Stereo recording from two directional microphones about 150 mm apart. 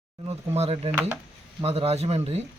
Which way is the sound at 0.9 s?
15° right (ahead or behind).